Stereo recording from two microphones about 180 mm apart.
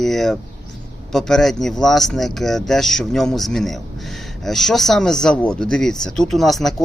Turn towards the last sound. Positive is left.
turn(degrees=0)  # may be behind; listen again after turning